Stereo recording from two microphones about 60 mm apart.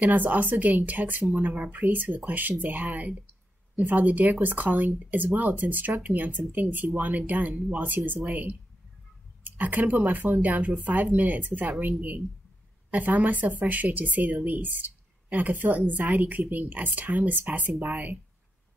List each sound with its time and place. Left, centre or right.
0.0 s speech: right
12.9 s speech: right